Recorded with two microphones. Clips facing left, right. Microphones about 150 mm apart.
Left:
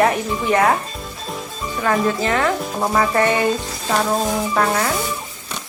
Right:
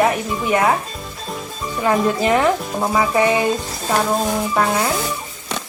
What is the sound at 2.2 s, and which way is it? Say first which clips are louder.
Music: right 3 dB; 15° right (ahead or behind).